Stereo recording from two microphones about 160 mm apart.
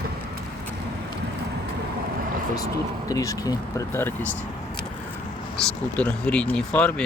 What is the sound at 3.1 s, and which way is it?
Speech, 20° left (ahead or behind).